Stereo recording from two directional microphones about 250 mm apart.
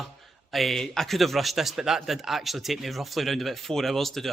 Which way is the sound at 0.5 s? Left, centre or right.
Centre.